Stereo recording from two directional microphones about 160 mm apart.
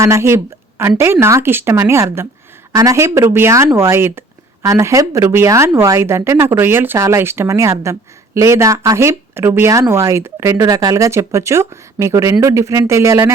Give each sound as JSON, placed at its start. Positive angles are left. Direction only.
{"t": 0.0, "sound": "speech", "side_deg": -15}